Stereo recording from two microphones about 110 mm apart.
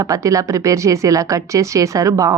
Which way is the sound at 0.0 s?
30° right (ahead or behind).